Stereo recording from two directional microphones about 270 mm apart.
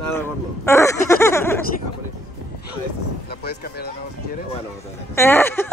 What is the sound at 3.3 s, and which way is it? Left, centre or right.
Speech, left.